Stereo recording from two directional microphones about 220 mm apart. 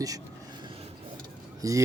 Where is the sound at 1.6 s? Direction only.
15° right (ahead or behind).